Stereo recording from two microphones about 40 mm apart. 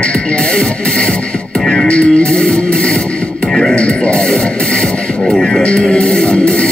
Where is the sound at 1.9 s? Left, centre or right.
Left.